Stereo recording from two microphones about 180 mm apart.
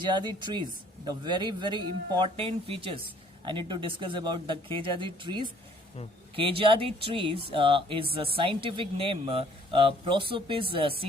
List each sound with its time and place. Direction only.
0.0 s a man's voice: 25° right (ahead or behind)